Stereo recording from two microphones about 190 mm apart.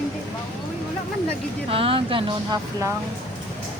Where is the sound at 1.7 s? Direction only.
30° right (ahead or behind).